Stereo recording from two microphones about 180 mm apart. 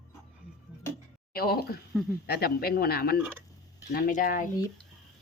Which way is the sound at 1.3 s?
60° left (ahead or behind).